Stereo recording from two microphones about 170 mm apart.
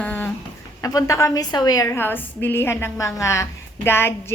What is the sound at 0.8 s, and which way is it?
Speech, 20° left (ahead or behind).